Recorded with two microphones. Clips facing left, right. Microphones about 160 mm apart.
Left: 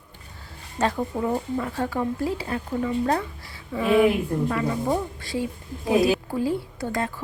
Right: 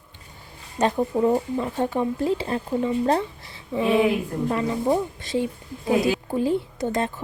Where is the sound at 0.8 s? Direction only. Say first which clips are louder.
Right 4 dB; 20° right (ahead or behind).